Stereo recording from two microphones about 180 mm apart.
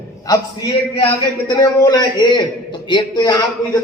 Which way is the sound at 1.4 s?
20° left (ahead or behind).